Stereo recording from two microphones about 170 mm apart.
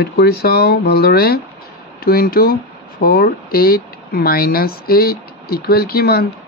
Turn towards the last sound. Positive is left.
turn(degrees=65)  # may be behind; listen again after turning